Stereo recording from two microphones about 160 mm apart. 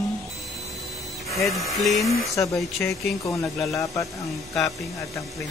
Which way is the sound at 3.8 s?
20° left (ahead or behind).